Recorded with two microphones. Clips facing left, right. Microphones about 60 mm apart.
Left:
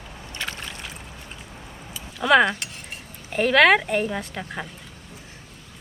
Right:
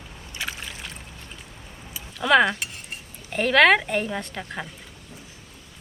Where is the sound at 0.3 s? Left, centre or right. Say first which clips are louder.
Even; centre.